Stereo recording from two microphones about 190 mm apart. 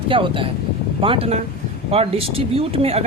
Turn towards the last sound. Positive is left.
turn(degrees=-30)  # may be behind; listen again after turning